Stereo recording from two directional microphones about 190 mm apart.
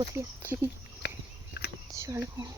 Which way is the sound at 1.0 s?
65° left (ahead or behind).